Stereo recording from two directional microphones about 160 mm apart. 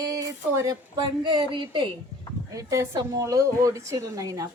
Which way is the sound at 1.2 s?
30° right (ahead or behind).